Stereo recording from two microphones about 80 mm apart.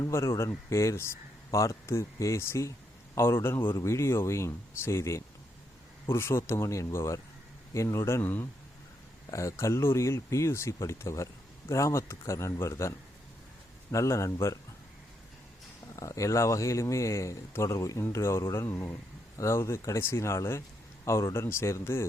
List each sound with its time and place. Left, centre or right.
0.0 s a man's voice: left
8.2 s speech: left
9.3 s a man's voice: left
13.9 s a man's voice: left
16.0 s a man's voice: left